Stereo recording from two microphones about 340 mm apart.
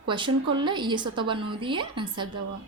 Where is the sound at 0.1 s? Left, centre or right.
Centre.